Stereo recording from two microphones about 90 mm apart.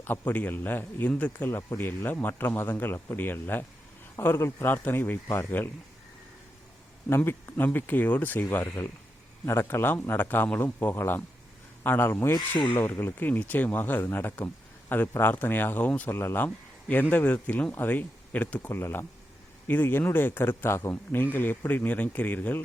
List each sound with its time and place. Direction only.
0.0 s speech: 20° left (ahead or behind)
7.4 s speech: 25° left (ahead or behind)